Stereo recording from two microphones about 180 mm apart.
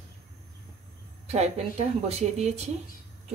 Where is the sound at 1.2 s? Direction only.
35° right (ahead or behind).